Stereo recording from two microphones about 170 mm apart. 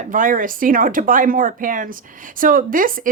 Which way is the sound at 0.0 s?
50° right (ahead or behind).